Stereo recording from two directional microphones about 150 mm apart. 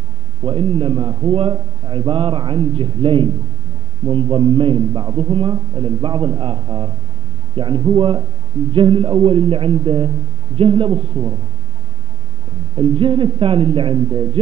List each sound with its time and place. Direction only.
0.5 s a man's voice: 35° right (ahead or behind)
12.7 s a man's voice: 35° right (ahead or behind)